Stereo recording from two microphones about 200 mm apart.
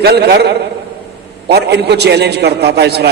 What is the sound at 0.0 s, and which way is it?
A man's voice, 55° right (ahead or behind).